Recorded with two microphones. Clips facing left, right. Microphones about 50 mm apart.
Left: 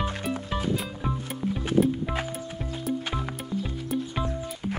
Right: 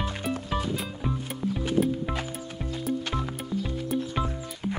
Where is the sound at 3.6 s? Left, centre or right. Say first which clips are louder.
Right 1 dB; centre.